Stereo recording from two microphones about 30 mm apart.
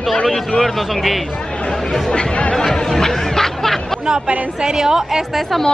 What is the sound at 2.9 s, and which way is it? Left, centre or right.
Snicker, centre.